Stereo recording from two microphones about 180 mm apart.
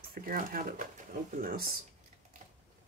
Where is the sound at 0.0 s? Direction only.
55° right (ahead or behind).